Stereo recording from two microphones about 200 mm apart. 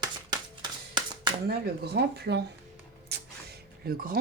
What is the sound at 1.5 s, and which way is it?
Speech, 55° right (ahead or behind).